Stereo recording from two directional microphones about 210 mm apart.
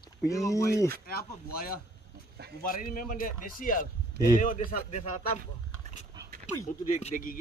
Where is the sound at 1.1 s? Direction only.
45° left (ahead or behind).